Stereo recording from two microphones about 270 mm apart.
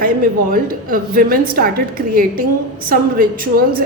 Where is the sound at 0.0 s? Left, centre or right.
Right.